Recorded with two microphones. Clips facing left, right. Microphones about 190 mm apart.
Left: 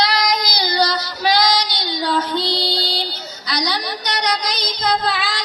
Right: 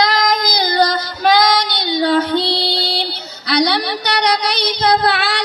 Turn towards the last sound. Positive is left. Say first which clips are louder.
# right 5 dB
turn(degrees=-70)  # may be behind; listen again after turning